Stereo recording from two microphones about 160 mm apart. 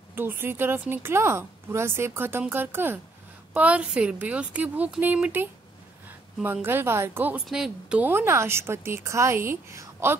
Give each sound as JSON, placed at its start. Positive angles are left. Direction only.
{"t": 0.1, "sound": "speech", "side_deg": -15}